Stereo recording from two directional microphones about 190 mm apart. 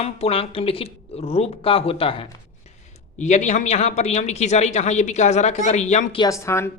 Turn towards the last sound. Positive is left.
turn(degrees=15)  # may be behind; listen again after turning